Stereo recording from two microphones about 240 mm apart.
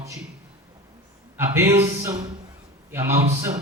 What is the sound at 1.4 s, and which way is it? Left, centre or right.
Speech, centre.